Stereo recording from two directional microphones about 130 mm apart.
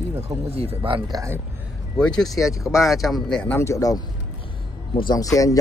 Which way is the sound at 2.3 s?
25° left (ahead or behind).